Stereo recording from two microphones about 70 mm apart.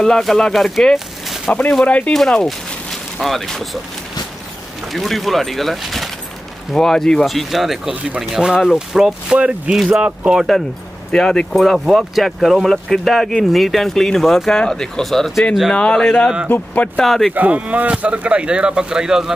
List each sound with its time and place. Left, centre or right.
0.0 s speech: centre
1.5 s speech: centre
2.1 s speech: centre
4.9 s speech: centre
11.1 s speech: centre
15.7 s speech: centre
16.4 s speech: left
17.0 s speech: centre
17.3 s speech: right